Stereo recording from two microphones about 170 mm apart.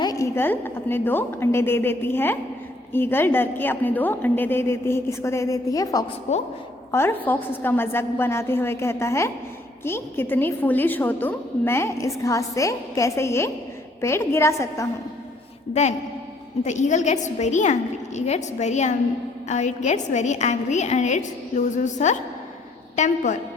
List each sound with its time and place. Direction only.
0.0 s a woman's voice: 20° left (ahead or behind)
6.3 s a woman's voice: 40° left (ahead or behind)
6.9 s a woman's voice: 10° left (ahead or behind)
15.7 s a woman's voice: 45° left (ahead or behind)